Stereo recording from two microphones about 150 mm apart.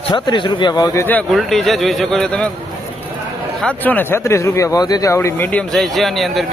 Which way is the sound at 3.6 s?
10° left (ahead or behind).